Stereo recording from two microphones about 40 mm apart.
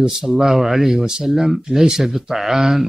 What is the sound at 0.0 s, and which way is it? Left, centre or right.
Speech, centre.